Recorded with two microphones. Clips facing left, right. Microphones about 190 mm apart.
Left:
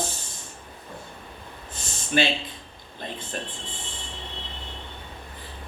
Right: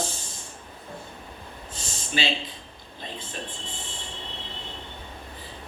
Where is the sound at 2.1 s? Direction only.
55° left (ahead or behind).